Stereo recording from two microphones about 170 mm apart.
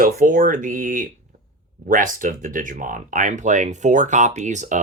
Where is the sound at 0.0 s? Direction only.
50° right (ahead or behind).